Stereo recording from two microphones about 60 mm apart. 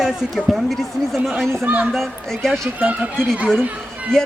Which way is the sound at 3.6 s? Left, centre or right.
Right.